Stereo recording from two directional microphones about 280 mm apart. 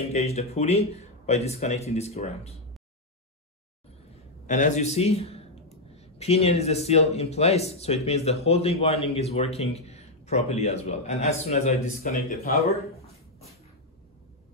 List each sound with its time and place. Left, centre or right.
0.1 s speech: left
4.5 s speech: left